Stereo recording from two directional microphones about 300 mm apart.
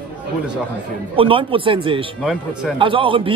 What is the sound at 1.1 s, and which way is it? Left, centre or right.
Speech, centre.